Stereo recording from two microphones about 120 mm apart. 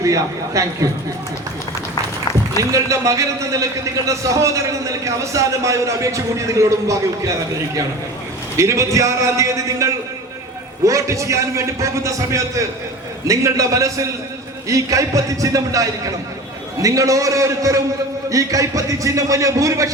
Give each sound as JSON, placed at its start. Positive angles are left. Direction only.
{"t": 0.0, "sound": "speech", "side_deg": -25}
{"t": 2.6, "sound": "speech", "side_deg": -25}
{"t": 8.5, "sound": "speech", "side_deg": -25}